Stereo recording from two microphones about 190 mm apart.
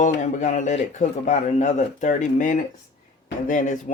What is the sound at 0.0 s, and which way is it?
Speech, 40° left (ahead or behind).